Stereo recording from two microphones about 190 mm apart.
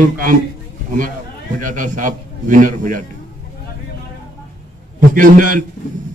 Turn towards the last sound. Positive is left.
turn(degrees=-45)  # may be behind; listen again after turning